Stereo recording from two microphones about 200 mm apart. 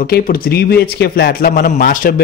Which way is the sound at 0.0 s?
50° left (ahead or behind).